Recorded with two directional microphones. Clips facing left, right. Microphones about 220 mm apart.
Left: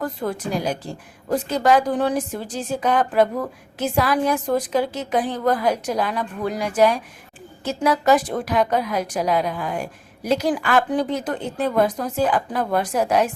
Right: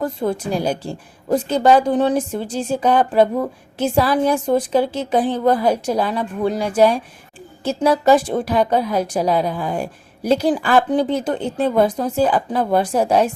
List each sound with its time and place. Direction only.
0.0 s a woman's voice: 25° right (ahead or behind)